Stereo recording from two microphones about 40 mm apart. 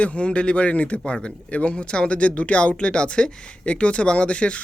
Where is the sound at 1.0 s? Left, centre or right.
Left.